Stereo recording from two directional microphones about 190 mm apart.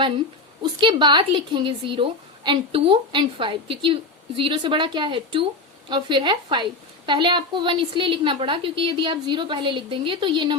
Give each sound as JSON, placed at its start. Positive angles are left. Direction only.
{"t": 0.6, "sound": "a woman's voice", "side_deg": -25}